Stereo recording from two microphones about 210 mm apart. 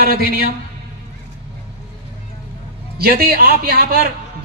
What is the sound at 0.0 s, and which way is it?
Speech, 45° right (ahead or behind).